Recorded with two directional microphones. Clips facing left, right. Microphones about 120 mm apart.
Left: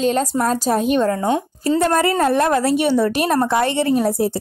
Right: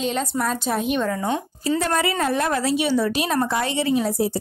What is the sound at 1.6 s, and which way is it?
Speech, 50° left (ahead or behind).